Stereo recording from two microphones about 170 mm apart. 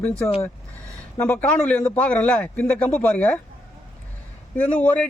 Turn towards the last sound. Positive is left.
turn(degrees=10)  # may be behind; listen again after turning